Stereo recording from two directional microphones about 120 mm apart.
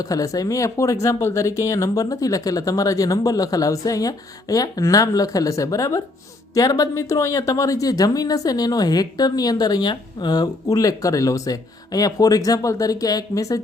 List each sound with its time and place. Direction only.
0.0 s speech: 30° left (ahead or behind)